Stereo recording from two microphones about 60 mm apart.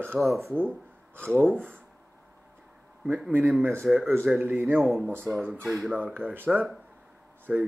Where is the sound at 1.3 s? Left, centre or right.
Right.